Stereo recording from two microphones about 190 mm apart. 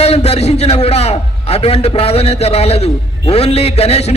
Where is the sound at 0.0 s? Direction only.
35° left (ahead or behind).